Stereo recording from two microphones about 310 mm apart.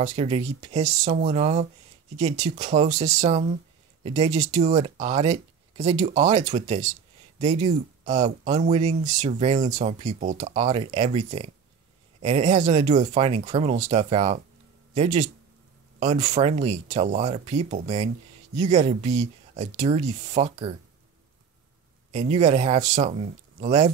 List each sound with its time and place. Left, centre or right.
0.0 s speech: right
22.1 s speech: right